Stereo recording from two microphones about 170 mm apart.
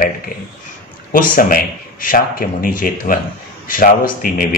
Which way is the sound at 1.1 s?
55° left (ahead or behind).